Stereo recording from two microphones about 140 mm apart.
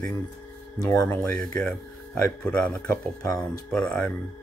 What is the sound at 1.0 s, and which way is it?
Speech, 15° left (ahead or behind).